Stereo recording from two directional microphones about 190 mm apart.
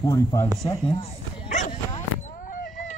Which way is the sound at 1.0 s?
40° left (ahead or behind).